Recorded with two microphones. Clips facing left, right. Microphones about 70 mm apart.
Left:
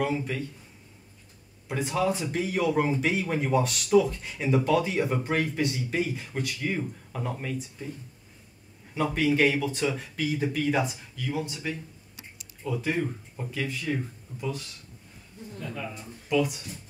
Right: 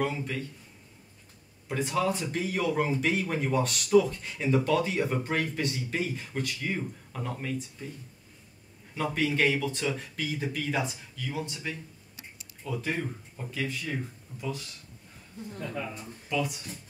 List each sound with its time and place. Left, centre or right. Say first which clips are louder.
0.0 s speech: left 2 dB; centre
1.7 s speech: left 1 dB; centre
8.9 s speech: left 4 dB; centre
16.3 s speech: left 5 dB; centre